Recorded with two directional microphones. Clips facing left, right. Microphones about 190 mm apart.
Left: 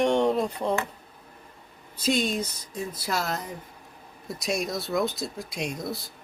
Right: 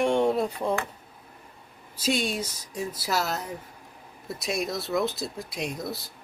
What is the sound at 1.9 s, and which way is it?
Speech, 10° right (ahead or behind).